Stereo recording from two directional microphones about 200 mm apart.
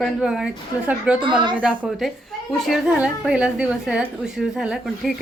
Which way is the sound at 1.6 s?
5° right (ahead or behind).